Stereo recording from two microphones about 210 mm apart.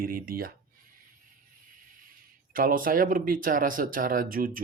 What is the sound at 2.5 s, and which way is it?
Speech, 40° right (ahead or behind).